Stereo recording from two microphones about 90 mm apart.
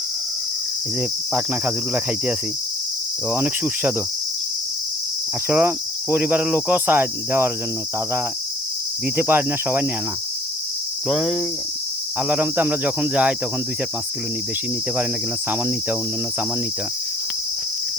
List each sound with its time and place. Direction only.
1.3 s speech: 15° right (ahead or behind)
3.3 s cricket: 20° right (ahead or behind)
5.5 s cricket: 25° right (ahead or behind)
9.1 s cricket: 25° right (ahead or behind)
11.1 s speech: 5° right (ahead or behind)
12.3 s cricket: 20° right (ahead or behind)
15.4 s cricket: 20° right (ahead or behind)